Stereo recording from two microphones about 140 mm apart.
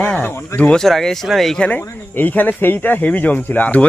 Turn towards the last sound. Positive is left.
turn(degrees=10)  # may be behind; listen again after turning